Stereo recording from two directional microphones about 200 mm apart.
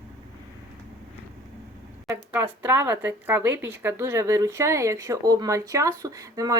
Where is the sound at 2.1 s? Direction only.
10° right (ahead or behind).